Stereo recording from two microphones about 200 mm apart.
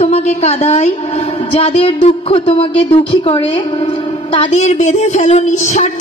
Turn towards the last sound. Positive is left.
turn(degrees=35)  # may be behind; listen again after turning